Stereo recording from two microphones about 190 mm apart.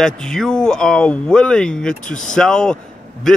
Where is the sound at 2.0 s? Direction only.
40° left (ahead or behind).